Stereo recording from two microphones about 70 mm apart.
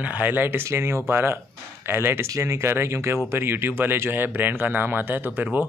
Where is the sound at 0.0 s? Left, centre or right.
Right.